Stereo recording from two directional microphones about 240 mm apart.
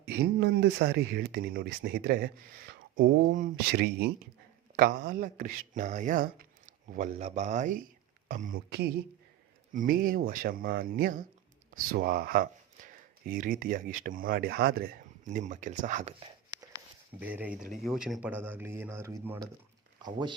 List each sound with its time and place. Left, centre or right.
0.0 s speech: right
17.2 s speech: centre